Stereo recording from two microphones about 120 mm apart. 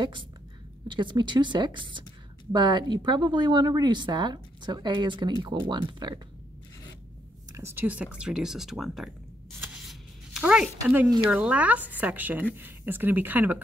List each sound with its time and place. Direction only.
0.8 s speech: 40° right (ahead or behind)
7.5 s speech: 20° right (ahead or behind); by 9.1 s centre (ahead or behind)
9.8 s a sound: centre (ahead or behind)
10.4 s speech: 10° right (ahead or behind)